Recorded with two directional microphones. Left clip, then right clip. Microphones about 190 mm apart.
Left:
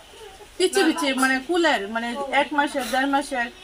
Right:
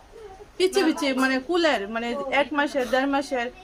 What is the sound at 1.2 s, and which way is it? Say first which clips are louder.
A woman's voice: left 2 dB; 25° right (ahead or behind).